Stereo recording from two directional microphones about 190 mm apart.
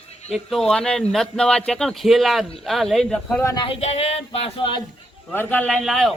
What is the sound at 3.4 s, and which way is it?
Speech, 25° left (ahead or behind).